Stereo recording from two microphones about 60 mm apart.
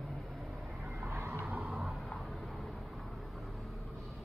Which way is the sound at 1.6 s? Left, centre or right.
Centre.